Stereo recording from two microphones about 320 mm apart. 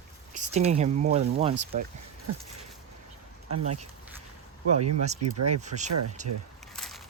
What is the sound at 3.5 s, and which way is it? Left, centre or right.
Speech, right.